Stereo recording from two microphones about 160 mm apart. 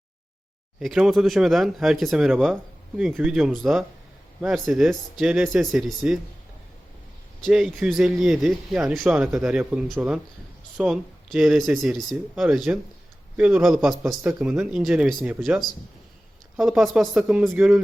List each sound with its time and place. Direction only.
0.8 s speech: centre (ahead or behind)
7.4 s speech: centre (ahead or behind)